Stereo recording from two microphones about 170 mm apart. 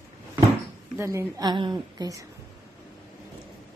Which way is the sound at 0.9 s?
15° right (ahead or behind).